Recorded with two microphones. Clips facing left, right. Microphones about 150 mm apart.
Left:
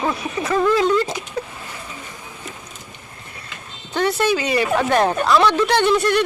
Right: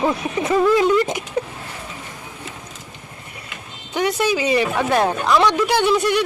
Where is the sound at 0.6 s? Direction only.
10° right (ahead or behind).